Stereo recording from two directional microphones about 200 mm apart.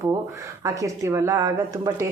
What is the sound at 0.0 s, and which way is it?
Speech, 15° right (ahead or behind).